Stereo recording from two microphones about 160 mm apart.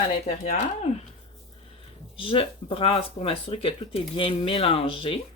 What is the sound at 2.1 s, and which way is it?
Speech, 35° left (ahead or behind).